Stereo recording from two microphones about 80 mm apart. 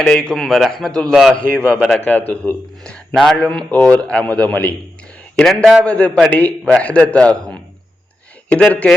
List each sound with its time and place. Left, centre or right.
0.0 s a man's voice: centre
5.4 s a man's voice: centre
5.8 s speech: centre